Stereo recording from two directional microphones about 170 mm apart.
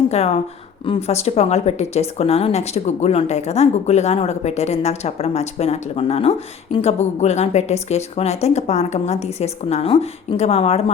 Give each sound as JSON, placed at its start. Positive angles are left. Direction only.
{"t": 0.1, "sound": "a woman's voice", "side_deg": 40}